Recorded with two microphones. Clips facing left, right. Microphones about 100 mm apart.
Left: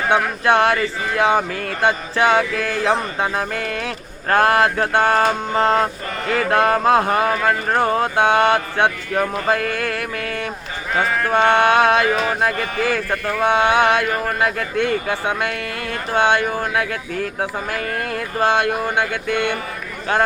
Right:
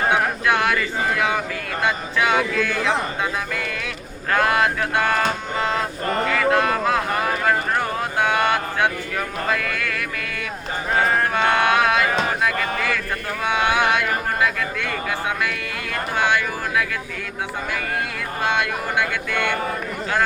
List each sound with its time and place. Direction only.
0.1 s speech: 30° left (ahead or behind)
11.0 s a sound: 35° right (ahead or behind)
11.3 s speech: 30° left (ahead or behind)
16.1 s speech: 30° left (ahead or behind)
18.4 s speech: 35° left (ahead or behind)
19.3 s speech: 45° right (ahead or behind)